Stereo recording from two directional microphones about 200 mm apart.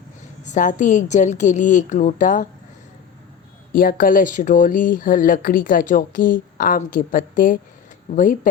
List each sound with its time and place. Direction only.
0.4 s a woman's voice: 40° left (ahead or behind)
3.7 s a woman's voice: 45° left (ahead or behind)